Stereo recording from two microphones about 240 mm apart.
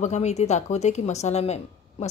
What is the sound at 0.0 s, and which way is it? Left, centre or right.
Speech, left.